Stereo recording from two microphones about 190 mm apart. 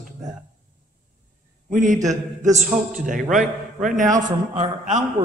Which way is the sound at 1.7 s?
45° right (ahead or behind).